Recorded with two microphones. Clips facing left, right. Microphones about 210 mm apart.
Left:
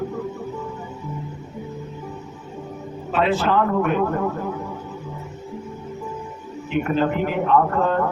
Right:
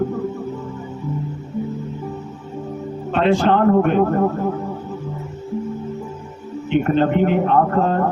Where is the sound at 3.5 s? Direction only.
40° right (ahead or behind).